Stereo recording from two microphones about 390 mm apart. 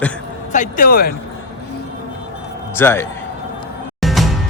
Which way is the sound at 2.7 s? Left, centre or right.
Centre.